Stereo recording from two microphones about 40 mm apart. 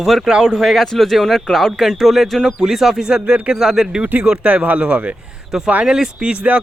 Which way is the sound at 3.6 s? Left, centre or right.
Centre.